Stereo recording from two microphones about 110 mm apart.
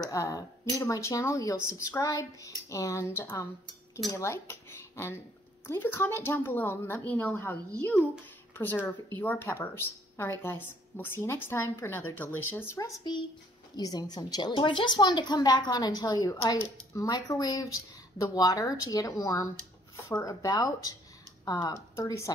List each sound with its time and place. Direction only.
0.0 s a woman's voice: 30° left (ahead or behind)